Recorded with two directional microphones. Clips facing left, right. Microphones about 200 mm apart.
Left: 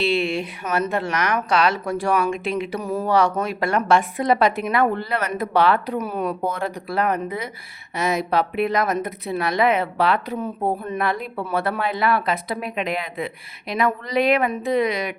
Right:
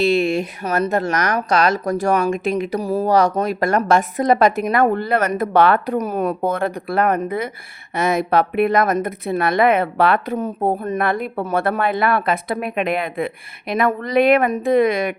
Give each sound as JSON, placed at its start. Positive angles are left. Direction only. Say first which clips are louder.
{"t": 0.0, "sound": "speech", "louder": "right 5 dB", "side_deg": -45}